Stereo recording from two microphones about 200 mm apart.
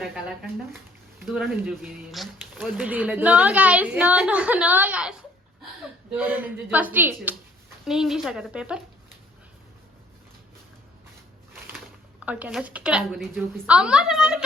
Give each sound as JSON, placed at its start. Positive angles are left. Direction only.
{"t": 1.2, "sound": "speech", "side_deg": -5}
{"t": 6.1, "sound": "a woman's voice", "side_deg": -5}
{"t": 12.2, "sound": "a woman's voice", "side_deg": -5}